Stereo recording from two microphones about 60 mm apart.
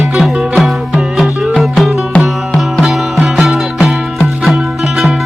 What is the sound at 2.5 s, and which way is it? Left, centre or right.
Music, centre.